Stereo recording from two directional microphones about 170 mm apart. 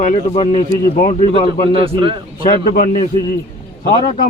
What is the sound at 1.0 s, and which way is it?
Speech, 30° left (ahead or behind).